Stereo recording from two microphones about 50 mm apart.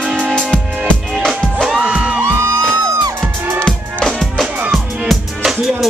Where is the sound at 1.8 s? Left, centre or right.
Right.